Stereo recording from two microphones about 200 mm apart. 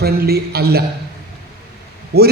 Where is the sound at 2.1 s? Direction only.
50° right (ahead or behind).